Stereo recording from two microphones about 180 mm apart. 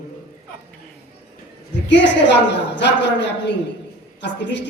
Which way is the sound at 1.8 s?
80° left.